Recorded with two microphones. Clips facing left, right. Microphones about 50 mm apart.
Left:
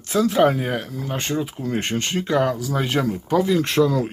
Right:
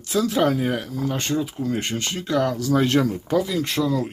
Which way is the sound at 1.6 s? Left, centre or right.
Left.